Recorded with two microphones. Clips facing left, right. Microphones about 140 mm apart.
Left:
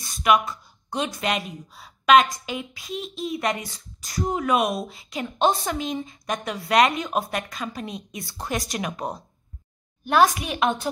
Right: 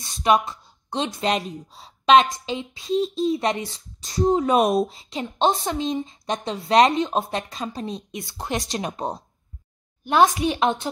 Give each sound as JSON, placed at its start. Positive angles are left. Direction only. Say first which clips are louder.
{"t": 0.0, "sound": "a woman's voice", "louder": "right 1 dB", "side_deg": -30}